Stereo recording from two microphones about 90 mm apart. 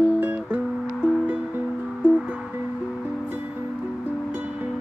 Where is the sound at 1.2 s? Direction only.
20° right (ahead or behind).